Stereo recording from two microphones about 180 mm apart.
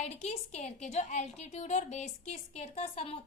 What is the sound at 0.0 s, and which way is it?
A woman's voice, 40° left (ahead or behind).